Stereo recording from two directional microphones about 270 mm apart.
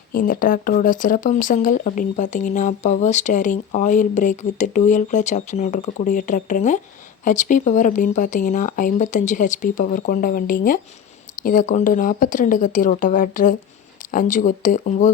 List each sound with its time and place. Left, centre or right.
0.1 s speech: left